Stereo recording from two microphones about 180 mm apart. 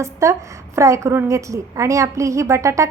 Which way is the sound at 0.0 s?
15° right (ahead or behind).